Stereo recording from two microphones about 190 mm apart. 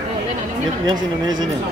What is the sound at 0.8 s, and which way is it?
Speech, 20° right (ahead or behind).